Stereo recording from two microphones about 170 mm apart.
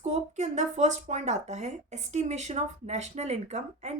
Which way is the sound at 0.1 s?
40° right (ahead or behind).